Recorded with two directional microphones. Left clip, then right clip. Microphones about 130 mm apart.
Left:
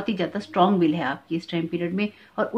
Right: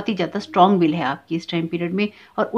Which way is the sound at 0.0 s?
35° right (ahead or behind).